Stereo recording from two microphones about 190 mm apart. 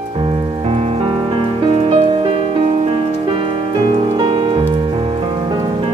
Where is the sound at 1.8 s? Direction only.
30° right (ahead or behind).